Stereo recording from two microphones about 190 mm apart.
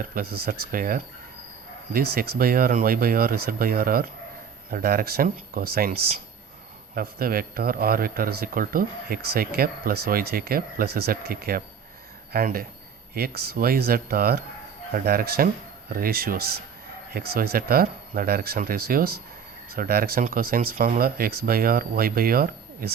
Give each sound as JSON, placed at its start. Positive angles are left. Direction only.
{"t": 0.1, "sound": "speech", "side_deg": -50}